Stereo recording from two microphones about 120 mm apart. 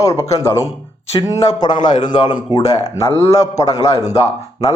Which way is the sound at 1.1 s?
40° left (ahead or behind).